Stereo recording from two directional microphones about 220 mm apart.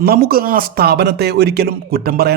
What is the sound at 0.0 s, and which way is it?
A man's voice, 45° right (ahead or behind).